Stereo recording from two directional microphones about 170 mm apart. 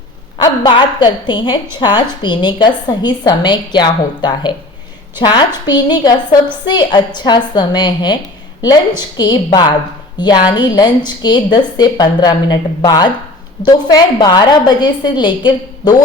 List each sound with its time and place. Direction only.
0.4 s a woman's voice: 25° left (ahead or behind)